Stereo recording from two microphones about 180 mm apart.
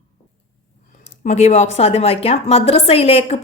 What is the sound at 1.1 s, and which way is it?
A woman's voice, 35° left (ahead or behind).